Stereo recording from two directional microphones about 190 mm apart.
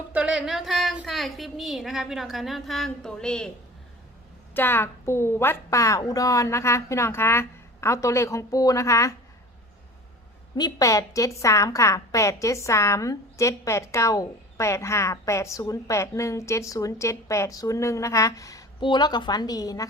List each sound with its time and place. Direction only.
0.1 s a woman's voice: 5° right (ahead or behind)
4.5 s a woman's voice: 10° left (ahead or behind)
10.6 s a woman's voice: 20° left (ahead or behind)